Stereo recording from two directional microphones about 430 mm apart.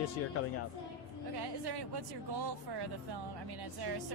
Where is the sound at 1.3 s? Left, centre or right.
Right.